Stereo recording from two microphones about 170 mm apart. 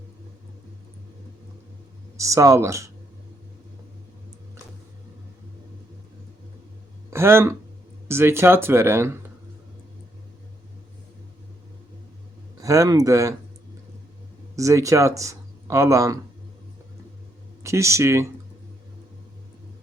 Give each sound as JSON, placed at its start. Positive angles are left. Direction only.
{"t": 2.1, "sound": "speech", "side_deg": -20}
{"t": 7.1, "sound": "speech", "side_deg": -15}
{"t": 12.5, "sound": "speech", "side_deg": -20}
{"t": 14.5, "sound": "speech", "side_deg": -20}
{"t": 17.6, "sound": "speech", "side_deg": -15}